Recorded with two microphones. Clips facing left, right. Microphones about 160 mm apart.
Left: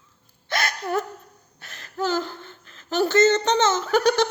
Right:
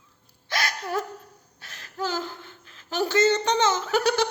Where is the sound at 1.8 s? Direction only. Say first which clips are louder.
Left 4 dB; 10° right (ahead or behind).